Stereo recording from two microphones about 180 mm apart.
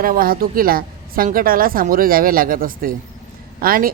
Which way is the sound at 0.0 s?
50° right (ahead or behind).